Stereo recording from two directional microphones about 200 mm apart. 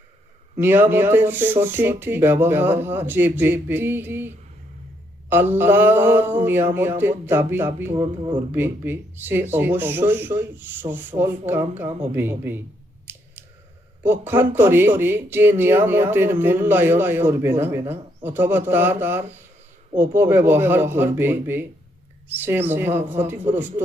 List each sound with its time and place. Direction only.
0.5 s speech: 10° right (ahead or behind)
5.3 s speech: 10° right (ahead or behind)
7.9 s speech: 20° right (ahead or behind)
8.5 s speech: 10° right (ahead or behind)
13.1 s a sound: 10° right (ahead or behind)
14.0 s speech: 10° right (ahead or behind)